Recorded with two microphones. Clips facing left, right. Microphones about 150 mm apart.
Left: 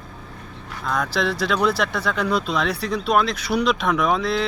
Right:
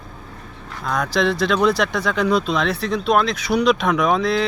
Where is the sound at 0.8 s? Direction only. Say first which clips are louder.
Right 3 dB; centre (ahead or behind).